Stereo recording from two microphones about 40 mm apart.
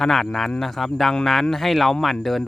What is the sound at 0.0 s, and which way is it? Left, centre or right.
Speech, centre.